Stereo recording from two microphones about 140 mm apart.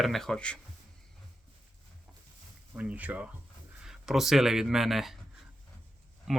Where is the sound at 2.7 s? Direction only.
10° right (ahead or behind).